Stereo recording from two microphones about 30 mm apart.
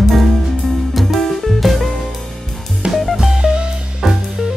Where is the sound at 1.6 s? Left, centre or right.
Centre.